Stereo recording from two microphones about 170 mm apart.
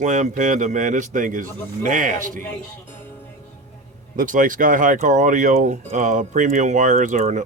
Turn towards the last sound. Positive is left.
turn(degrees=-45)  # may be behind; listen again after turning